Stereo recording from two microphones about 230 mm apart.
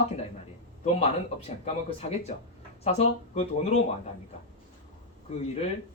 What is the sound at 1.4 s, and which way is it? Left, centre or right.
Speech, left.